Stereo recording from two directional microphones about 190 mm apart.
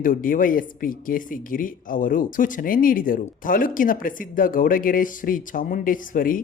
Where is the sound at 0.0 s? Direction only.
45° left (ahead or behind).